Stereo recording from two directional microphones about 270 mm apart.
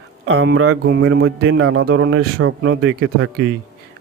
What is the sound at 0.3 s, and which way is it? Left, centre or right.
Speech, right.